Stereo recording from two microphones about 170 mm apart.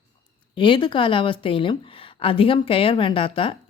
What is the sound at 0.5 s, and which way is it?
Speech, 30° left (ahead or behind).